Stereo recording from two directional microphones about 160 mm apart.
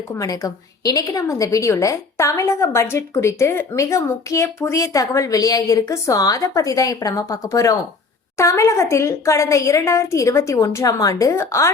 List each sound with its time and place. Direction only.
0.1 s a woman's voice: 20° left (ahead or behind)